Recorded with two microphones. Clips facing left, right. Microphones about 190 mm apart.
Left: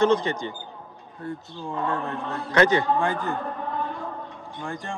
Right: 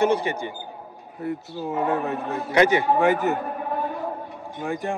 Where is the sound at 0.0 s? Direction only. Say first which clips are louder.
Even; 10° right (ahead or behind).